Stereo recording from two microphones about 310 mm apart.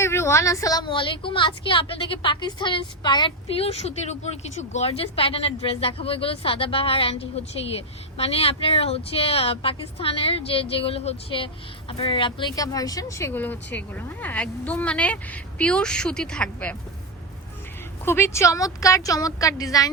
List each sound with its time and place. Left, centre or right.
0.0 s a woman's voice: centre
18.0 s a woman's voice: centre